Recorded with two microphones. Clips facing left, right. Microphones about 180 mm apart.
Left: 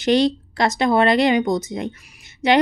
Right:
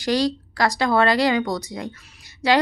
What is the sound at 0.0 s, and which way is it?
A woman's voice, 25° left (ahead or behind).